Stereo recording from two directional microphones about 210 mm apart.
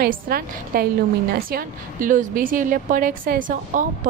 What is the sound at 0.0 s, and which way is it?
A woman's voice, 45° right (ahead or behind).